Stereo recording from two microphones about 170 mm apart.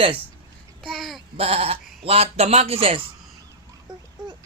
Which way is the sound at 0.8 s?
Centre (ahead or behind).